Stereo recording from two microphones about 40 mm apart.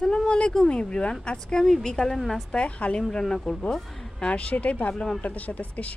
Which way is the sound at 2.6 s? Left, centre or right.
Left.